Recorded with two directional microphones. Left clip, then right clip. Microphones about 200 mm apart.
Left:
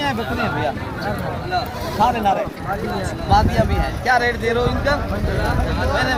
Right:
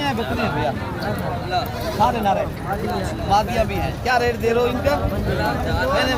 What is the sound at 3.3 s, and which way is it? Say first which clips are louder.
Speech: left 2 dB; 15° right (ahead or behind).